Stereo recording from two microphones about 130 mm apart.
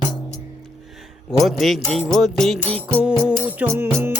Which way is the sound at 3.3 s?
15° right (ahead or behind).